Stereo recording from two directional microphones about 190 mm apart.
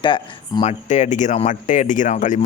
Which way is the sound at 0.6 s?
40° left (ahead or behind).